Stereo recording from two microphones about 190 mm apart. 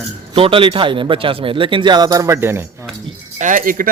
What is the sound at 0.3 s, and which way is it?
Speech, 30° right (ahead or behind).